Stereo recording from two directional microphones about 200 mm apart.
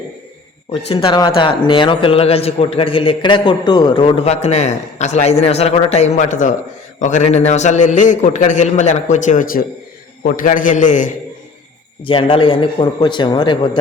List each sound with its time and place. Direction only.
0.9 s a man's voice: 25° left (ahead or behind)
12.0 s a man's voice: 25° left (ahead or behind)